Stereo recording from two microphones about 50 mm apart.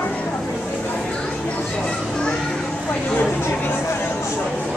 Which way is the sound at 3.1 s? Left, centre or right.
Left.